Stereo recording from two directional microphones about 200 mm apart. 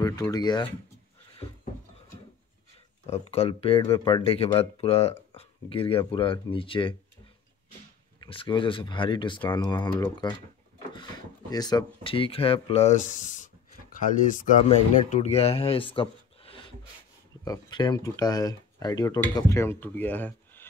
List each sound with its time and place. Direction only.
0.0 s speech: 15° left (ahead or behind)
3.1 s speech: 30° left (ahead or behind)
8.2 s speech: 25° left (ahead or behind)
11.5 s speech: 20° left (ahead or behind)
15.9 s a sound: 25° left (ahead or behind)
17.5 s speech: 20° left (ahead or behind)